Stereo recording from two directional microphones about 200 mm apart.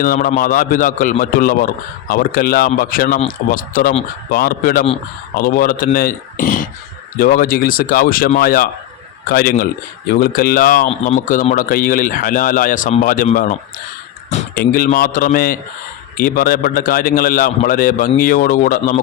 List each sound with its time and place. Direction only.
0.0 s a man's voice: 45° left (ahead or behind)